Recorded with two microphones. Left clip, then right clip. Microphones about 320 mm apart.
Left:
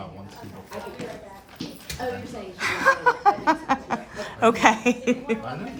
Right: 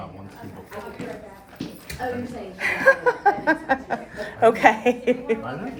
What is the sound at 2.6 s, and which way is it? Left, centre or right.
Chuckle, left.